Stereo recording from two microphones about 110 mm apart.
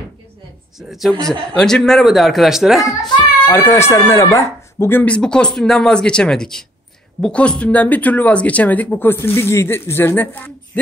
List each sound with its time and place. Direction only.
0.7 s speech: 5° right (ahead or behind)
3.5 s speech: 20° left (ahead or behind)
5.1 s speech: 10° left (ahead or behind)